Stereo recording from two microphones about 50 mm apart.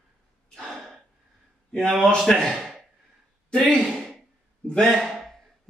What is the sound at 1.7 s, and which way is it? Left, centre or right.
Speech, centre.